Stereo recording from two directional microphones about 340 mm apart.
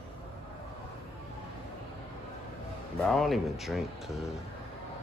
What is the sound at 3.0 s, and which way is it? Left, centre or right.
A man's voice, centre.